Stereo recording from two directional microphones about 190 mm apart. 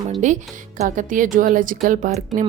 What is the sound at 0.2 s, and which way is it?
A woman's voice, 40° right (ahead or behind).